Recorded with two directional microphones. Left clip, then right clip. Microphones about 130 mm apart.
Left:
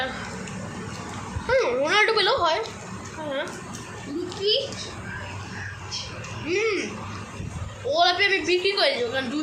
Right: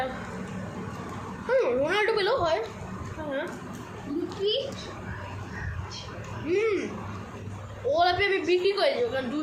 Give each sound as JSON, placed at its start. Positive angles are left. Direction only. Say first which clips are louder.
{"t": 1.5, "sound": "a sound", "louder": "left 2 dB", "side_deg": -10}
{"t": 4.4, "sound": "a child's voice", "louder": "left 5 dB", "side_deg": -30}
{"t": 6.5, "sound": "speech", "louder": "left 1 dB", "side_deg": -10}
{"t": 7.9, "sound": "a woman's voice", "louder": "left 3 dB", "side_deg": -10}